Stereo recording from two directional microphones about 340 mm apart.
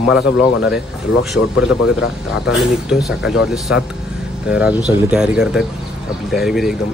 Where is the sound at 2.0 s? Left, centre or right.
Left.